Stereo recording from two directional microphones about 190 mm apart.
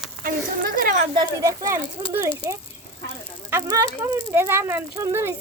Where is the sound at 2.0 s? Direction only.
20° right (ahead or behind).